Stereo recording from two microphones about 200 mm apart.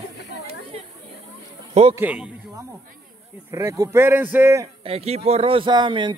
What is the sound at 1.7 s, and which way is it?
Speech, 30° right (ahead or behind).